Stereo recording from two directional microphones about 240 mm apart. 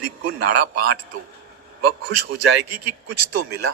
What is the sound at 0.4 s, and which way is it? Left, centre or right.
A man's voice, right.